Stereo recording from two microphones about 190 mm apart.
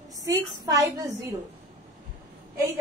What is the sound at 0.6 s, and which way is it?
Speech, 15° right (ahead or behind).